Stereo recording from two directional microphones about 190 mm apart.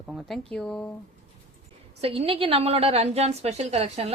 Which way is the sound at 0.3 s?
5° left (ahead or behind).